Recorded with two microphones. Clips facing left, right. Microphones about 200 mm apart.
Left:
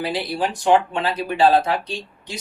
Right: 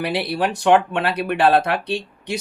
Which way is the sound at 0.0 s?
65° right (ahead or behind).